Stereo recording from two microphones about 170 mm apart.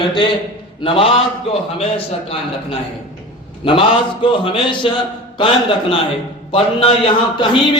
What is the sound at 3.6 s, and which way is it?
A man's voice, 30° left (ahead or behind).